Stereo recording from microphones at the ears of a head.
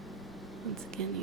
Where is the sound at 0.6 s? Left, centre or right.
Right.